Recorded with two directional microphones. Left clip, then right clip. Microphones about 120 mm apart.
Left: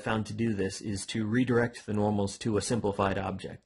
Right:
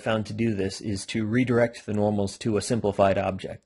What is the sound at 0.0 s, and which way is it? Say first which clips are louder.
Speech: right 5 dB; 20° right (ahead or behind).